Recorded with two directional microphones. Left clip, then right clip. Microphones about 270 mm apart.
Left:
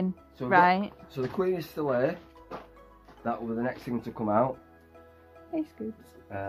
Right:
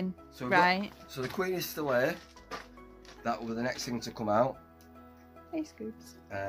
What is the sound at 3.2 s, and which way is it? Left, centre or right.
Speech, right.